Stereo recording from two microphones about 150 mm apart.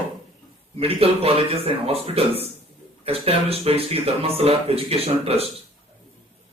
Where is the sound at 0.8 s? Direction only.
40° right (ahead or behind).